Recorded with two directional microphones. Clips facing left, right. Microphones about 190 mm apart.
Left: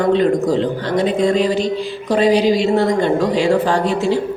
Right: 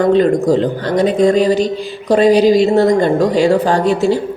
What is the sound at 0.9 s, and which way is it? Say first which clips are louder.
Speech: right 4 dB; 45° right (ahead or behind).